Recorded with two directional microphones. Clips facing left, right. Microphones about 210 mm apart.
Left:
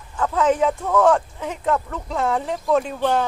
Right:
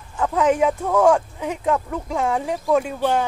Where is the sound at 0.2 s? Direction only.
15° right (ahead or behind).